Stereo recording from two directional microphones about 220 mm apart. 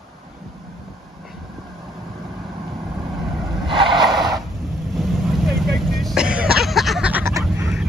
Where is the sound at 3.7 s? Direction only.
20° right (ahead or behind).